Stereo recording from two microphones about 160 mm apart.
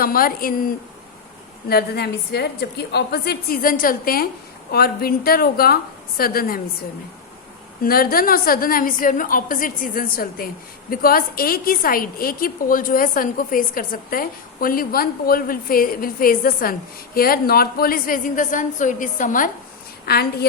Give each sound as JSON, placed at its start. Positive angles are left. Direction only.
{"t": 0.0, "sound": "a woman's voice", "side_deg": 65}
{"t": 1.7, "sound": "a woman's voice", "side_deg": 90}
{"t": 7.8, "sound": "a woman's voice", "side_deg": 65}
{"t": 20.1, "sound": "a woman's voice", "side_deg": 80}